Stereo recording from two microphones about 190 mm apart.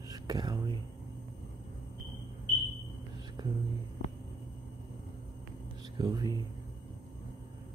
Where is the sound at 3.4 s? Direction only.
20° right (ahead or behind).